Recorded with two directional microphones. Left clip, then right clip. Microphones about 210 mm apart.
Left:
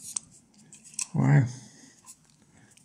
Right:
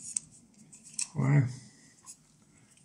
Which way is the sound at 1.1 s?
50° left (ahead or behind).